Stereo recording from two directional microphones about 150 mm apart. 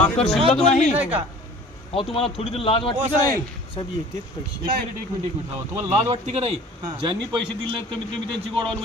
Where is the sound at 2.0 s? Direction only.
40° left (ahead or behind).